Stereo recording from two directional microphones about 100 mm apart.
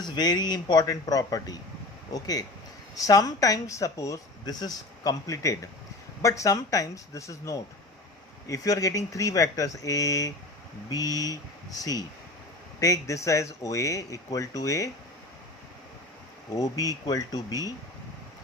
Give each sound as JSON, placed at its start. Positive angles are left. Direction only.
{"t": 0.0, "sound": "speech", "side_deg": 45}
{"t": 16.6, "sound": "speech", "side_deg": 35}